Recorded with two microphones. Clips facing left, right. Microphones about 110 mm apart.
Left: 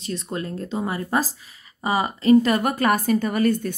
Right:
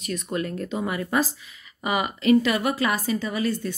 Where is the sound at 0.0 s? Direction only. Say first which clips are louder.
Right 1 dB; 30° left (ahead or behind).